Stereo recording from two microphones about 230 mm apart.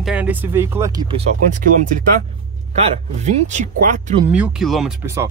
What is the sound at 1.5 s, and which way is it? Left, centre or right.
Speech, right.